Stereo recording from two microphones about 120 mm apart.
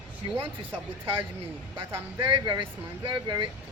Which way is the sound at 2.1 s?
40° right (ahead or behind).